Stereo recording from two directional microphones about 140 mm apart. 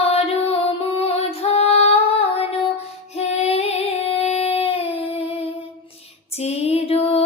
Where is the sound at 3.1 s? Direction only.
50° left (ahead or behind).